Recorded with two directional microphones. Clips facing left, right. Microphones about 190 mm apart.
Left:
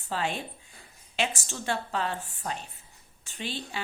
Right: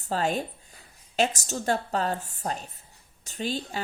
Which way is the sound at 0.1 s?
40° right (ahead or behind).